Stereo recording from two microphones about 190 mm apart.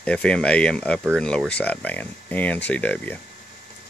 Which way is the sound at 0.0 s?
5° left (ahead or behind).